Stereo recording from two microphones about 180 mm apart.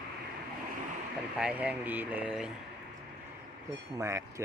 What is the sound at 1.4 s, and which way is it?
Speech, 5° right (ahead or behind).